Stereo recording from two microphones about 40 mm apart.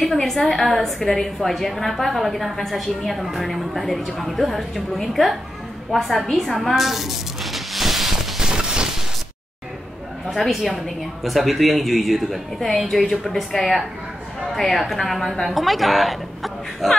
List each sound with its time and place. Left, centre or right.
0.0 s a woman's voice: centre
8.4 s a sound: centre
10.3 s a woman's voice: centre
14.4 s a woman's voice: centre